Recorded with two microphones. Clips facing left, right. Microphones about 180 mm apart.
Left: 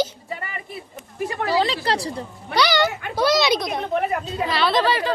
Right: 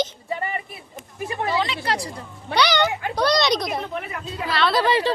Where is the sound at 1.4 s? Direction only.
35° left (ahead or behind).